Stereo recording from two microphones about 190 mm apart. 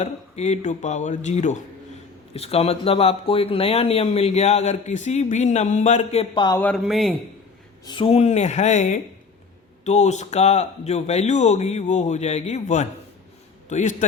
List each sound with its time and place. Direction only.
0.0 s speech: 35° left (ahead or behind)
6.6 s speech: 5° left (ahead or behind)
7.9 s a man's voice: 30° left (ahead or behind)